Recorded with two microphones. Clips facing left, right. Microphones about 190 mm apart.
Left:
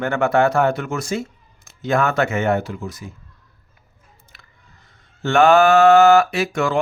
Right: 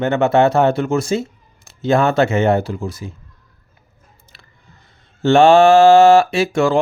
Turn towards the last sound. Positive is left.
turn(degrees=-30)  # may be behind; listen again after turning